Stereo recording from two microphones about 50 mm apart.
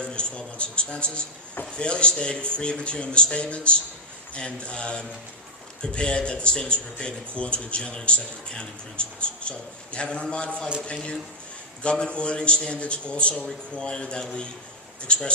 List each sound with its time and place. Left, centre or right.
0.0 s speech: left
11.8 s speech: left